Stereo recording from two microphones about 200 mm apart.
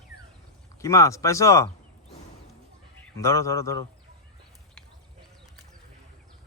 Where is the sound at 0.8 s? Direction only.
15° left (ahead or behind).